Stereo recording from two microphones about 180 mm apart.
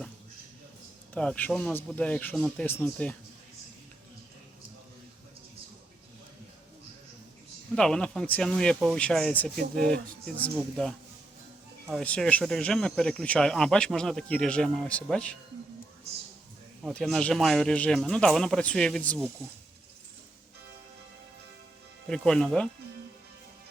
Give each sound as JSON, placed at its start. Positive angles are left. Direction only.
{"t": 1.1, "sound": "speech", "side_deg": 5}
{"t": 7.8, "sound": "speech", "side_deg": 5}
{"t": 16.8, "sound": "speech", "side_deg": 5}
{"t": 22.1, "sound": "speech", "side_deg": 5}